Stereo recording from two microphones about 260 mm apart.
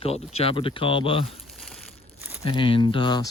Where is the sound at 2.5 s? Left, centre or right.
Centre.